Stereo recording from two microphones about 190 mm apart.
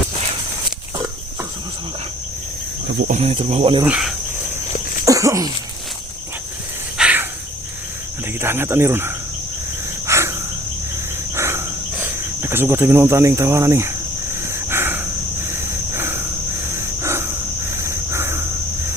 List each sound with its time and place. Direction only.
3.1 s speech: 35° right (ahead or behind)
3.8 s cricket: 5° right (ahead or behind)
5.0 s sneeze: 15° right (ahead or behind)
7.0 s cricket: 10° right (ahead or behind)
8.4 s speech: 10° right (ahead or behind)
10.1 s cricket: 15° right (ahead or behind)
12.4 s speech: 10° right (ahead or behind)
14.4 s a sound: 15° right (ahead or behind)
16.6 s cricket: 15° right (ahead or behind)
17.8 s a sound: 15° right (ahead or behind)